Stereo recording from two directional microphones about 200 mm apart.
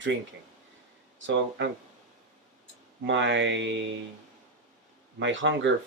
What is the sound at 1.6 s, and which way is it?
Speech, 65° right (ahead or behind).